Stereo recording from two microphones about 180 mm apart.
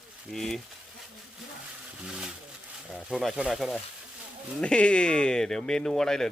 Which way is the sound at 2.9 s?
Centre (ahead or behind).